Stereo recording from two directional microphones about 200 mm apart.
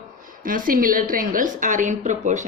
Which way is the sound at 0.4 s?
45° right (ahead or behind).